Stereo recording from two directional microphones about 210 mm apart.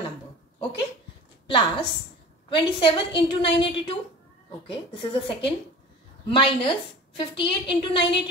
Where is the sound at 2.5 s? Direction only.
25° left (ahead or behind).